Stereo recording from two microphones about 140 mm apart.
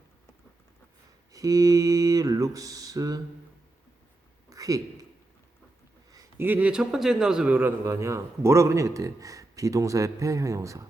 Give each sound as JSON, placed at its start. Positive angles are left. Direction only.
{"t": 1.3, "sound": "a man's voice", "side_deg": -25}
{"t": 4.4, "sound": "a sound", "side_deg": -25}
{"t": 6.1, "sound": "a man's voice", "side_deg": -20}